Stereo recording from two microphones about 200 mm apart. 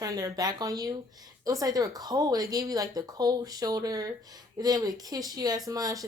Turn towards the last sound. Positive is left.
turn(degrees=-15)  # may be behind; listen again after turning